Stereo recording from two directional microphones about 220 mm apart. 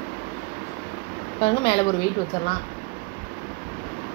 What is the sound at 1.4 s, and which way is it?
Speech, 25° left (ahead or behind).